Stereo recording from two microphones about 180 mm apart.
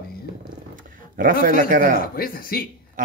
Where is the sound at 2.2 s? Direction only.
55° left (ahead or behind).